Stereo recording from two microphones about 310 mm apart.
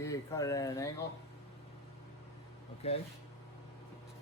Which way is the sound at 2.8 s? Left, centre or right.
Centre.